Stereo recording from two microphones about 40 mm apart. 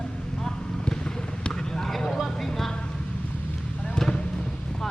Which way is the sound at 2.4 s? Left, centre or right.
Centre.